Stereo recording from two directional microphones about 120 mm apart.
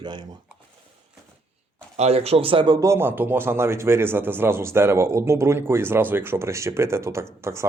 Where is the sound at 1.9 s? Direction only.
60° right (ahead or behind).